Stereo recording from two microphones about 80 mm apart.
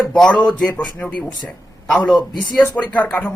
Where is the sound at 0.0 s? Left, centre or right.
Centre.